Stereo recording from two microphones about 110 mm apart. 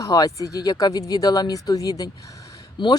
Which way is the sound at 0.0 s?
35° left (ahead or behind).